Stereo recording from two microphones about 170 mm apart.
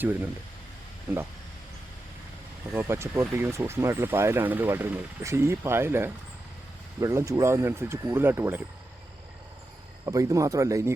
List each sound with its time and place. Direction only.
0.0 s speech: 10° right (ahead or behind)
2.7 s speech: 15° right (ahead or behind)
10.1 s speech: 20° right (ahead or behind)